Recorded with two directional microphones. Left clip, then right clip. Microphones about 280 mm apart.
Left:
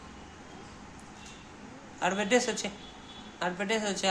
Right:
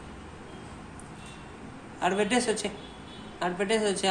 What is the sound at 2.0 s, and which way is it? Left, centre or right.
Speech, centre.